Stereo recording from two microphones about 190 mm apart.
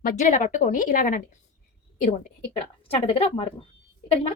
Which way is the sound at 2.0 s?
35° left (ahead or behind).